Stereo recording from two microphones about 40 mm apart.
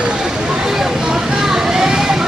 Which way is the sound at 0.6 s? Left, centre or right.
Centre.